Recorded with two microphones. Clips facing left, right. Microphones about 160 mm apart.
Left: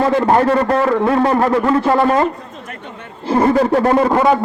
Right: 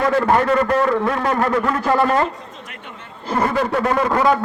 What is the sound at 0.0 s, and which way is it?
A man's voice, 25° left (ahead or behind).